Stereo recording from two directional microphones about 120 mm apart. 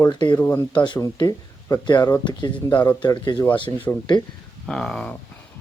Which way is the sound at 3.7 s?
25° left (ahead or behind).